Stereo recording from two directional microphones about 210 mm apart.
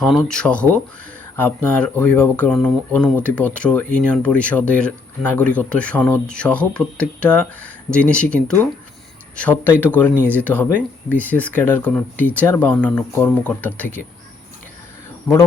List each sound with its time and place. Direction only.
0.0 s speech: 5° left (ahead or behind)